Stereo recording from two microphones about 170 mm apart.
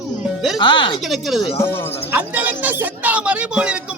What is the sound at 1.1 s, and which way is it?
Speech, centre (ahead or behind).